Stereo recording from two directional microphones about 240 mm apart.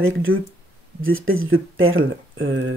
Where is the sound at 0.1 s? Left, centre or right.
Right.